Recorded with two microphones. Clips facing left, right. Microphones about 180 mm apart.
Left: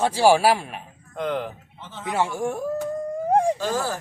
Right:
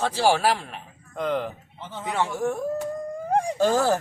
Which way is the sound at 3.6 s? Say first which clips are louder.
Right 5 dB; 45° right (ahead or behind).